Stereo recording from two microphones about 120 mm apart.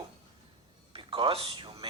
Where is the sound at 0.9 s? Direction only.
45° right (ahead or behind).